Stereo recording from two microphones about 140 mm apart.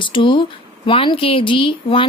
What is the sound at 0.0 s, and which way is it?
Speech, 35° left (ahead or behind).